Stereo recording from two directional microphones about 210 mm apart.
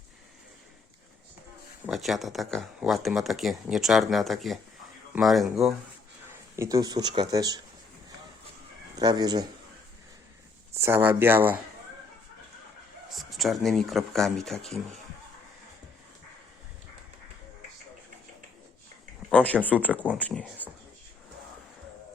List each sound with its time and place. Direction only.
1.9 s speech: centre (ahead or behind)
6.6 s speech: 15° right (ahead or behind)
9.0 s speech: 20° right (ahead or behind)
10.8 s speech: 10° right (ahead or behind)
13.1 s speech: centre (ahead or behind)
19.3 s a sound: 5° left (ahead or behind)
19.6 s speech: 10° left (ahead or behind)